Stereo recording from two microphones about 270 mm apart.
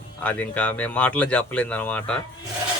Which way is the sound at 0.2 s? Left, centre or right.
Centre.